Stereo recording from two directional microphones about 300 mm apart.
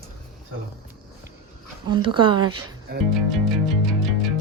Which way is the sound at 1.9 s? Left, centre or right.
Centre.